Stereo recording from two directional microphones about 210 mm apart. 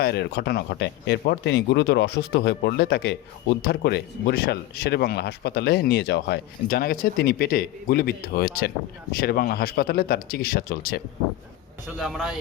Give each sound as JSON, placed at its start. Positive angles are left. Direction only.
{"t": 0.0, "sound": "speech", "side_deg": 50}
{"t": 11.9, "sound": "speech", "side_deg": 0}